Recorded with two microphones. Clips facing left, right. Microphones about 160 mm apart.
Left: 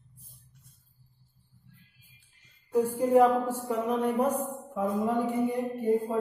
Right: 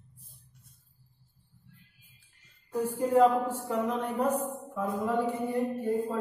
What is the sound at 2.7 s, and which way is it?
Mantra, 15° left (ahead or behind).